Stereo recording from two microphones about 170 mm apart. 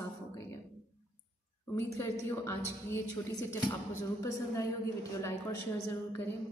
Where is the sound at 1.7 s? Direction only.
15° left (ahead or behind).